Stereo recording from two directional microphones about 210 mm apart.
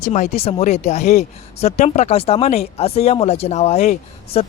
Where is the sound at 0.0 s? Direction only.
35° left (ahead or behind).